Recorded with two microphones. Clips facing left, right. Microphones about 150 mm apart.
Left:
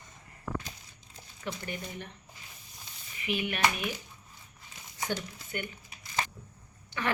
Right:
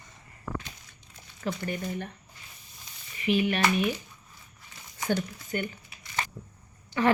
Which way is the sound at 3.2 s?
35° right (ahead or behind).